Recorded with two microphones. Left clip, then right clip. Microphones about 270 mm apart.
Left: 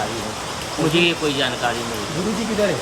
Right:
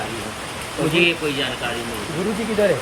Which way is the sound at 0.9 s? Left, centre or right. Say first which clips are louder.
Right 1 dB; centre.